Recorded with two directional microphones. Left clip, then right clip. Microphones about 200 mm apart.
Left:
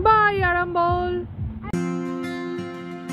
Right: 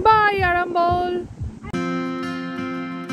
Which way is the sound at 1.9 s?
5° right (ahead or behind).